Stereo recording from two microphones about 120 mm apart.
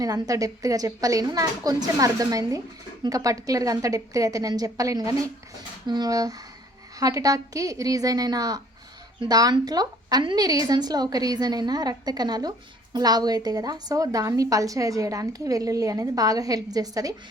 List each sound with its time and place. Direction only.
0.0 s a woman's voice: 30° right (ahead or behind)